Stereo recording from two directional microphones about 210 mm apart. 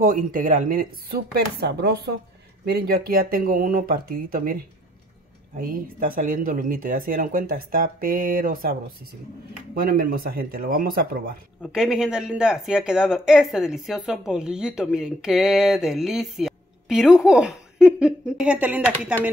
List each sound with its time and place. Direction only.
0.0 s speech: 40° right (ahead or behind)
5.6 s speech: 40° right (ahead or behind)
9.8 s speech: 45° right (ahead or behind)
11.6 s speech: centre (ahead or behind)